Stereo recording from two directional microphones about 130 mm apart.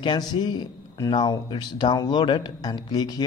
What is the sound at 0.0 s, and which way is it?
A man's voice, 35° left (ahead or behind).